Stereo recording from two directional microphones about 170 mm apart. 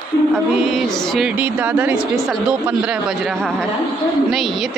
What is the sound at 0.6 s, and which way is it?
Speech, centre (ahead or behind).